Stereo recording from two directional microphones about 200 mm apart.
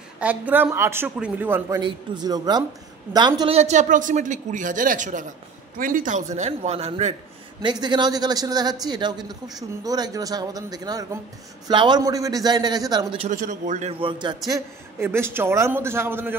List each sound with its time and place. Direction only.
0.2 s speech: 10° right (ahead or behind)
1.8 s speech: 20° right (ahead or behind)
3.5 s a man's voice: 35° right (ahead or behind); by 13.2 s 20° right (ahead or behind)
13.2 s speech: 40° right (ahead or behind); by 14.3 s 25° right (ahead or behind)
14.5 s speech: 10° right (ahead or behind)